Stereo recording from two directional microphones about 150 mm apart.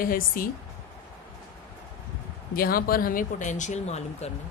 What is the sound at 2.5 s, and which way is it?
Speech, 75° left (ahead or behind).